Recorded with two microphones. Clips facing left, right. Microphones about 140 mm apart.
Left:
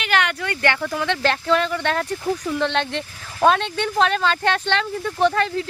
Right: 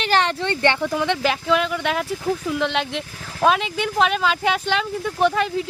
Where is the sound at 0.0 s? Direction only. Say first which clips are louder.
Right 2 dB; 35° right (ahead or behind).